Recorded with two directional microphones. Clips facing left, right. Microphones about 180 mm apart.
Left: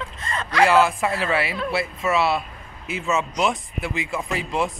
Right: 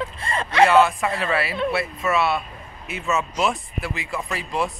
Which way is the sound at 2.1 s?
30° left (ahead or behind).